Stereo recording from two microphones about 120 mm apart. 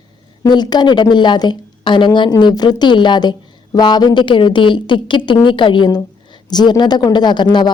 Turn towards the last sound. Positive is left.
turn(degrees=40)  # may be behind; listen again after turning